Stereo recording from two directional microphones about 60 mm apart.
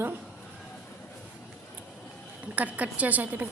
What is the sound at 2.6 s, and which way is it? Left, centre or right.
Speech, right.